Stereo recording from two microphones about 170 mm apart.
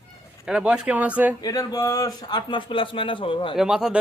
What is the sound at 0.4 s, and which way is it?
Speech, 5° right (ahead or behind).